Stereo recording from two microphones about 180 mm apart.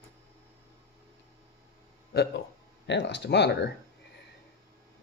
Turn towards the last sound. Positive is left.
turn(degrees=70)  # may be behind; listen again after turning